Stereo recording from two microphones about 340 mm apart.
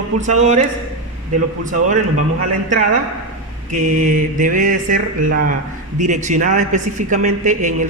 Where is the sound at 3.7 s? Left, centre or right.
Right.